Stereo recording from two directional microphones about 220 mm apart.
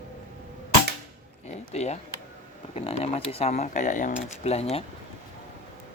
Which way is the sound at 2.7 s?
25° left (ahead or behind).